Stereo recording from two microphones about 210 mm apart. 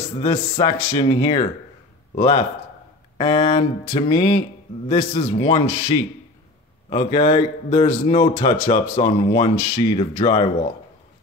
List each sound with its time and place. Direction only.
0.2 s a man's voice: 20° left (ahead or behind)